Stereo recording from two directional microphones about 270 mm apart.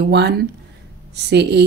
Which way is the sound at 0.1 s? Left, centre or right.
Right.